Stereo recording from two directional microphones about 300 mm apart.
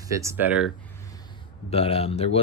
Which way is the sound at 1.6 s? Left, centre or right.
Centre.